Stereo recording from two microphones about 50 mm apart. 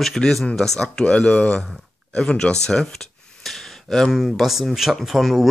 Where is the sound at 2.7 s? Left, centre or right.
Centre.